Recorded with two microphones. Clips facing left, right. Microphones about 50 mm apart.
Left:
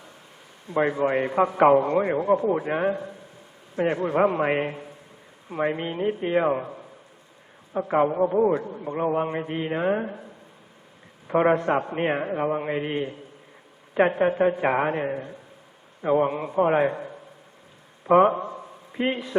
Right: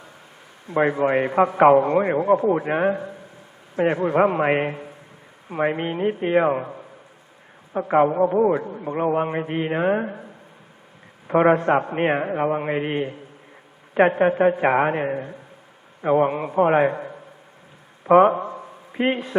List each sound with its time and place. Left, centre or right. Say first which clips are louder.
0.7 s a man's voice: right 3 dB; centre
2.0 s a man's voice: right 3 dB; right
7.7 s a man's voice: right 4 dB; centre
18.0 s a sound: right 3 dB; centre
18.9 s a man's voice: right 3 dB; right